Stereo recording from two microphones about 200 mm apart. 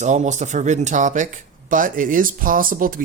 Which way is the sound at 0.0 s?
35° right (ahead or behind).